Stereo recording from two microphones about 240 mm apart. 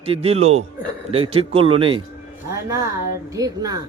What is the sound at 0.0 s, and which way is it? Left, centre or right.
Speech, right.